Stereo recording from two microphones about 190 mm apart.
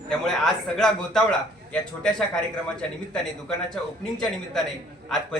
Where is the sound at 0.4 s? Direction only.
Centre (ahead or behind).